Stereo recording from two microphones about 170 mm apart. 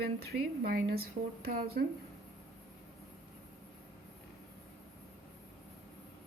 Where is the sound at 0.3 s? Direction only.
65° right (ahead or behind).